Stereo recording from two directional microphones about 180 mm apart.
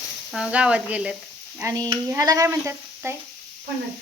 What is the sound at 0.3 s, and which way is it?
Speech, 5° right (ahead or behind).